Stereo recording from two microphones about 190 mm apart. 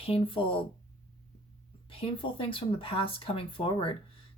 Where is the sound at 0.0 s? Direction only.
30° left (ahead or behind).